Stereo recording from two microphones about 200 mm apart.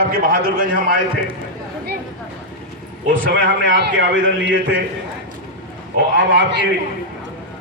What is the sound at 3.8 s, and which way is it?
Speech, 65° right (ahead or behind).